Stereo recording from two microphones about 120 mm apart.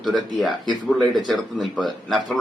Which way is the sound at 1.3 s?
Centre (ahead or behind).